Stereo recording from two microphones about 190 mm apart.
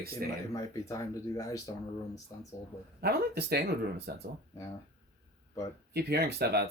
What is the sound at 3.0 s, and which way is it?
Speech, 55° right (ahead or behind).